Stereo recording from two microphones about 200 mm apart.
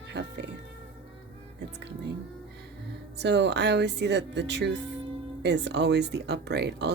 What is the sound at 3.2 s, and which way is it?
Speech, 60° right (ahead or behind).